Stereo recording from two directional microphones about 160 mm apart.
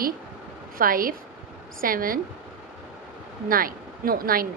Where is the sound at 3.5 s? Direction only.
65° right (ahead or behind).